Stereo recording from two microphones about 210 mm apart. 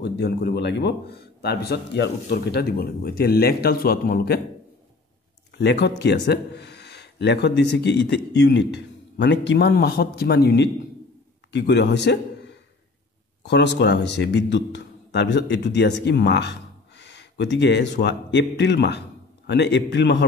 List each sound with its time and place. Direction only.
0.0 s speech: 50° left (ahead or behind)
5.6 s a man's voice: 55° left (ahead or behind)
13.4 s a man's voice: 55° left (ahead or behind)